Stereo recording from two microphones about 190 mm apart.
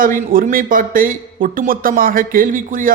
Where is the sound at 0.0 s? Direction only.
50° right (ahead or behind).